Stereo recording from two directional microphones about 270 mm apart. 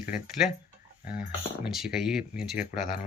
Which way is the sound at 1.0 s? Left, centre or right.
Left.